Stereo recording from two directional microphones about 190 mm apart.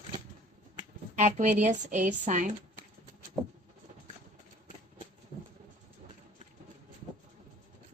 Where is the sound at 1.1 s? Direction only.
40° right (ahead or behind).